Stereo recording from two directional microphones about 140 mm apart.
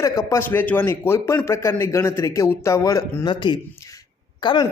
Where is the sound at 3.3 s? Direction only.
35° left (ahead or behind).